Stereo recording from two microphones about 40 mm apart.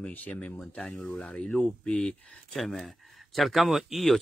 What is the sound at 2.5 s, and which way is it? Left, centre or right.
Speech, centre.